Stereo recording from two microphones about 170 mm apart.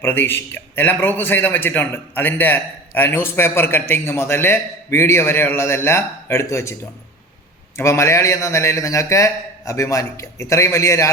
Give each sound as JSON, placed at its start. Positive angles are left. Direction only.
{"t": 0.0, "sound": "a man's voice", "side_deg": 15}
{"t": 7.8, "sound": "a man's voice", "side_deg": 15}